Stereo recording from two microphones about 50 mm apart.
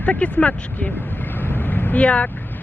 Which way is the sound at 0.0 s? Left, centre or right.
Left.